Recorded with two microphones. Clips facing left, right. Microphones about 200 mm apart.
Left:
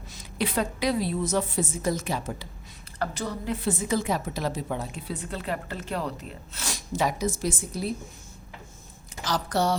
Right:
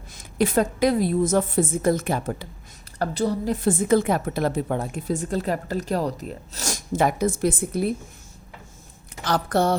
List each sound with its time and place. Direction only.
0.1 s a woman's voice: 50° right (ahead or behind)
3.0 s a woman's voice: 35° right (ahead or behind); by 7.9 s 55° right (ahead or behind)
9.2 s a woman's voice: 55° right (ahead or behind)